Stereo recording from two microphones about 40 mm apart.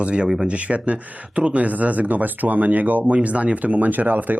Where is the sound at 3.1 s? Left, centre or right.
Right.